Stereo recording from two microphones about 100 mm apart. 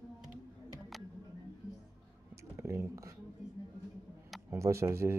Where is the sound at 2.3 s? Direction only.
30° right (ahead or behind).